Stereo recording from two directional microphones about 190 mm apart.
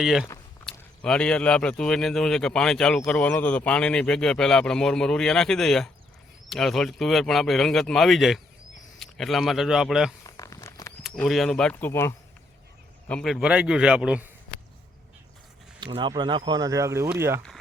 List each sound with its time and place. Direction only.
0.0 s speech: centre (ahead or behind)
10.2 s a sound: 15° left (ahead or behind)
11.0 s speech: centre (ahead or behind)
15.8 s speech: 25° right (ahead or behind)